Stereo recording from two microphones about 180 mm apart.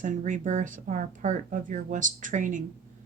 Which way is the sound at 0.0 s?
45° right (ahead or behind).